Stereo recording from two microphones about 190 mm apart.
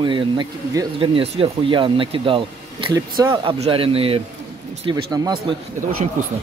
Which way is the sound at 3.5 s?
30° right (ahead or behind).